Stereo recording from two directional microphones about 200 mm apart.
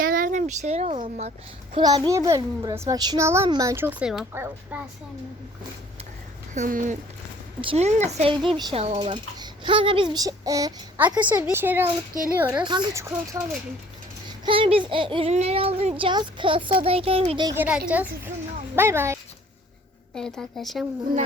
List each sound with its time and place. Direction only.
0.0 s a child's voice: 45° right (ahead or behind); by 4.9 s 10° right (ahead or behind)
6.5 s speech: 40° right (ahead or behind)
7.6 s a child's voice: 30° right (ahead or behind)
14.4 s a child's voice: 25° right (ahead or behind)
17.5 s a child's voice: 10° right (ahead or behind)
20.1 s a woman's voice: 5° left (ahead or behind)